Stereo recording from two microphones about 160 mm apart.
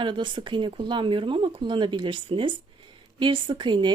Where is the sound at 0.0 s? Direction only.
30° right (ahead or behind).